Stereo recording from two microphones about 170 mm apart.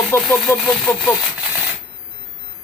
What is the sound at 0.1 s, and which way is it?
Speech, 15° left (ahead or behind).